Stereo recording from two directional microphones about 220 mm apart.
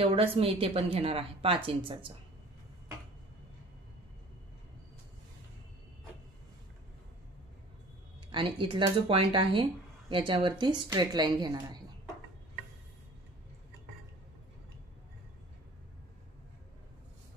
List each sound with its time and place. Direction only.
0.0 s speech: 25° right (ahead or behind)
8.3 s speech: 20° right (ahead or behind)